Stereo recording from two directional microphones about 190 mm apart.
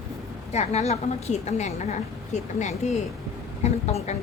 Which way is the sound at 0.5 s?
35° left (ahead or behind).